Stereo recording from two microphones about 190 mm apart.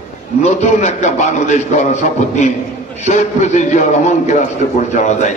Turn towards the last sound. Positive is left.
turn(degrees=40)  # may be behind; listen again after turning